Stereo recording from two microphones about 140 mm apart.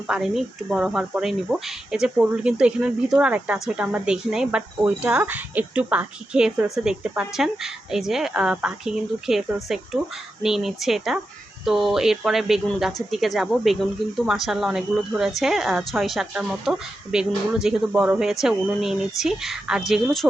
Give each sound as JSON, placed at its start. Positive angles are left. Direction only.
{"t": 0.1, "sound": "speech", "side_deg": -5}